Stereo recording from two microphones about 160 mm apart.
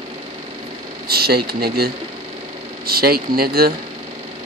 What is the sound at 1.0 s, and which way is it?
Speech, 75° right (ahead or behind).